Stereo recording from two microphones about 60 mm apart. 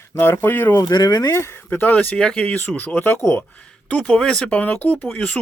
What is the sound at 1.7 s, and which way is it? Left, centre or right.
Speech, left.